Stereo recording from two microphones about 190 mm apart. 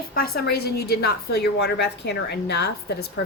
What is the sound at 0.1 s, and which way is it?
A woman's voice, 55° left (ahead or behind).